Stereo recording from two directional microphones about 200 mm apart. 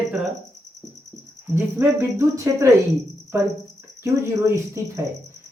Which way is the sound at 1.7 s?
10° right (ahead or behind).